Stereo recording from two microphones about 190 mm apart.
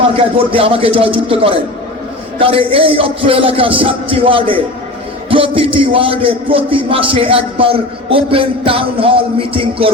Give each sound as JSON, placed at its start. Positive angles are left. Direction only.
{"t": 0.1, "sound": "a man's voice", "side_deg": -30}